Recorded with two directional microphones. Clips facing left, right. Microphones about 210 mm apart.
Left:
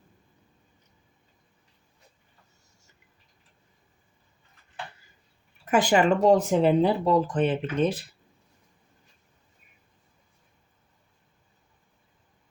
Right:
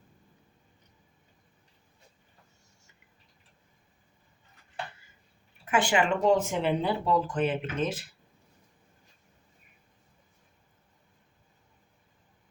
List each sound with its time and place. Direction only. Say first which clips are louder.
5.7 s speech: left 5 dB; 40° left (ahead or behind)